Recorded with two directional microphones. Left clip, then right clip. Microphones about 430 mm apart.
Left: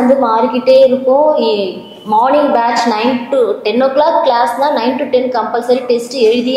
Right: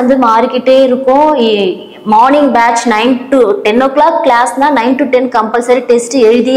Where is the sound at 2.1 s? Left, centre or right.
Right.